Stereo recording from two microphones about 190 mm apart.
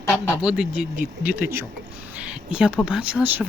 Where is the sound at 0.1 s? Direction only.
Centre (ahead or behind).